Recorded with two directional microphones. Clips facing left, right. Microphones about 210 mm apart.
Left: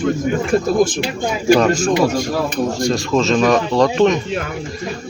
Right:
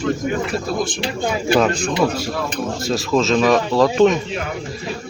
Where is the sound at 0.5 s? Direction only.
50° left (ahead or behind).